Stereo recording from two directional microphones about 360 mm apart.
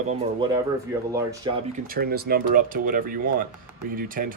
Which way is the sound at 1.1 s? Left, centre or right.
Centre.